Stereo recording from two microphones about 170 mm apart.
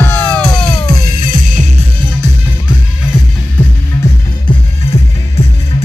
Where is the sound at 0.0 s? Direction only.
10° left (ahead or behind).